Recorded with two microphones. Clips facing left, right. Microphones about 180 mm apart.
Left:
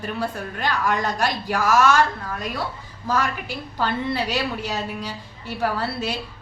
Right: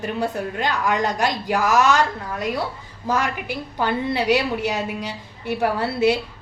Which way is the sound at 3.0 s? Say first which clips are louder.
Right 1 dB; 20° right (ahead or behind).